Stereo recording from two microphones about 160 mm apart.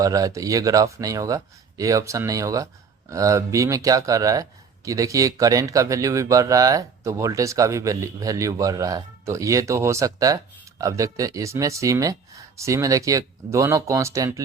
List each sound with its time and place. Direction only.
0.0 s speech: 20° right (ahead or behind)